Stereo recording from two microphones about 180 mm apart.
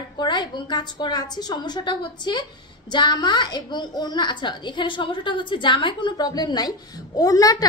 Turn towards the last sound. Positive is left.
turn(degrees=20)  # may be behind; listen again after turning